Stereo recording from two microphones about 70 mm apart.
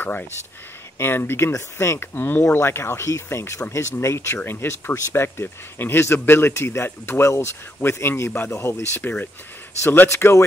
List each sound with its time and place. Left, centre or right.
0.0 s speech: left